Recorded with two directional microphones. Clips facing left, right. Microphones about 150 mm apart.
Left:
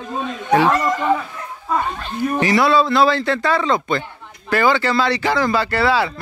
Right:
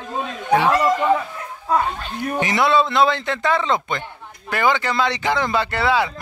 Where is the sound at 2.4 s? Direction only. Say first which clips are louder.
Left 2 dB; 20° right (ahead or behind).